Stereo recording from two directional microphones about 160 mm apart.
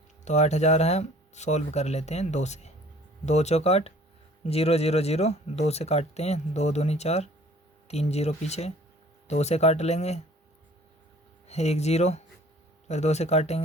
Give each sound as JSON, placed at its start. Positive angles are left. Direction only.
{"t": 0.3, "sound": "speech", "side_deg": 45}
{"t": 11.4, "sound": "speech", "side_deg": 40}